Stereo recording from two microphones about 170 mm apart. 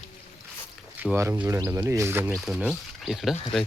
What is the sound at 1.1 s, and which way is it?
Speech, 15° right (ahead or behind).